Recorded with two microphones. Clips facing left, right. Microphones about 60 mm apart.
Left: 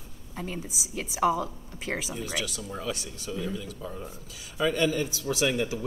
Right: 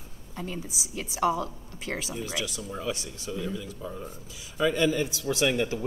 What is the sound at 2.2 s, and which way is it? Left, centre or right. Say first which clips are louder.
Speech: even; right.